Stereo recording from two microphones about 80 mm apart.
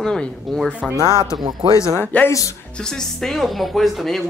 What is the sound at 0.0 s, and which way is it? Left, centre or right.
Speech, centre.